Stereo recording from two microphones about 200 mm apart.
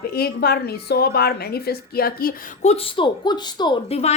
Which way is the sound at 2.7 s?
30° left (ahead or behind).